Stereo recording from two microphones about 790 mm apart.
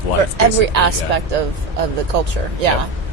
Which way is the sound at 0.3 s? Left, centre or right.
Right.